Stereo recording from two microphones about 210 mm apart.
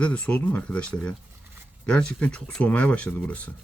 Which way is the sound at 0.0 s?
5° left (ahead or behind).